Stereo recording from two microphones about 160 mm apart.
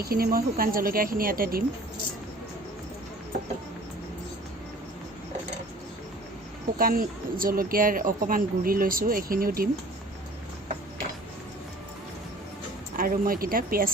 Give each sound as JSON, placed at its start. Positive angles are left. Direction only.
{"t": 0.0, "sound": "speech", "side_deg": -70}
{"t": 6.7, "sound": "speech", "side_deg": -65}
{"t": 13.0, "sound": "speech", "side_deg": -60}